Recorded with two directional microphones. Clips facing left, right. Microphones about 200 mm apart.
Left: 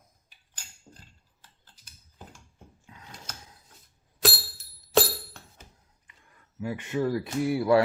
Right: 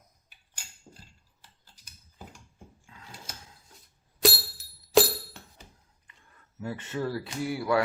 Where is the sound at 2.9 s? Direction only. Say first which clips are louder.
Left 5 dB; 20° left (ahead or behind).